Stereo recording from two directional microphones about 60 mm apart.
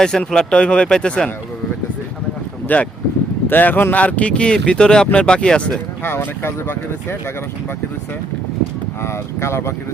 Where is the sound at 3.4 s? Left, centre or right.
Left; by 5.7 s centre.